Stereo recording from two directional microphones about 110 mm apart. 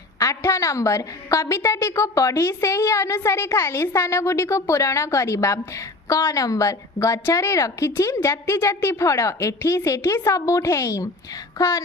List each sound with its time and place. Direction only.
0.2 s a woman's voice: 30° left (ahead or behind)